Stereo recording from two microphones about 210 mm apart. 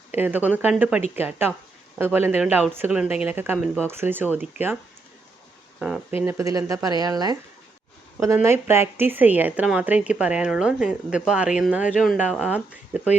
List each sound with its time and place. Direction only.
0.1 s speech: 10° right (ahead or behind)
5.8 s speech: 5° right (ahead or behind)
6.2 s speech: 15° right (ahead or behind)